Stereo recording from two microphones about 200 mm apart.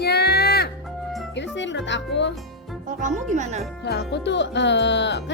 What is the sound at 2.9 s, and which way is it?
Speech, 40° right (ahead or behind).